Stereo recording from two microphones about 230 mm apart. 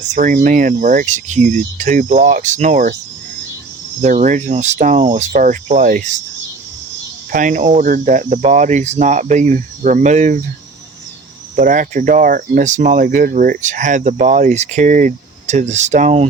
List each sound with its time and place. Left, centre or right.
0.1 s speech: right
4.0 s speech: right
7.3 s speech: right
11.5 s speech: right